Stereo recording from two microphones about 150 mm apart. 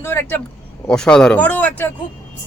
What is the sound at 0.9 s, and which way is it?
Speech, 5° left (ahead or behind).